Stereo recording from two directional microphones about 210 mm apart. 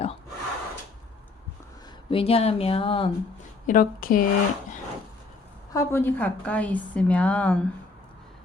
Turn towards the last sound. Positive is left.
turn(degrees=5)  # may be behind; listen again after turning